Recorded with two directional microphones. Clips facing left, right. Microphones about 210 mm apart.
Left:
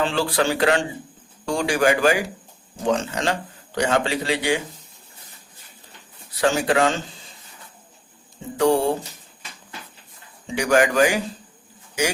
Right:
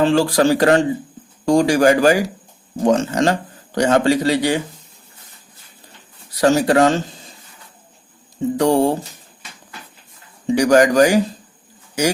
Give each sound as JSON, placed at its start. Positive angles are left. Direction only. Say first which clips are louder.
{"t": 0.0, "sound": "speech", "louder": "right 7 dB", "side_deg": -40}
{"t": 6.4, "sound": "speech", "louder": "right 6 dB", "side_deg": -40}
{"t": 8.5, "sound": "speech", "louder": "right 3 dB", "side_deg": -40}
{"t": 10.4, "sound": "speech", "louder": "right 6 dB", "side_deg": -40}